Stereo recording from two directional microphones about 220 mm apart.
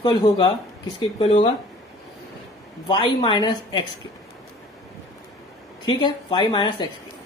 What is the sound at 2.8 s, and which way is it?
Speech, 20° left (ahead or behind).